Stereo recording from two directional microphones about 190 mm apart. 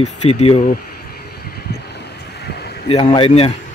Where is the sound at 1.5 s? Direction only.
60° left (ahead or behind).